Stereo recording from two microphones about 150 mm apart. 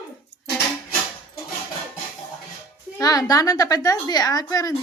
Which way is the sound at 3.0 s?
25° left (ahead or behind).